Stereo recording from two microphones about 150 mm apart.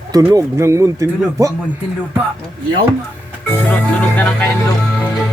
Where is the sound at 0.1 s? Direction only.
20° right (ahead or behind).